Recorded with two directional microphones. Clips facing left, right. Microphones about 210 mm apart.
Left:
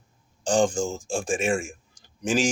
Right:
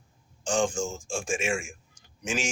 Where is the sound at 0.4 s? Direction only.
35° left (ahead or behind).